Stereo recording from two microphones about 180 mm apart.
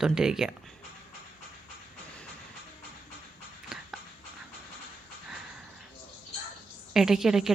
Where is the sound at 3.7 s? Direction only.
Centre (ahead or behind).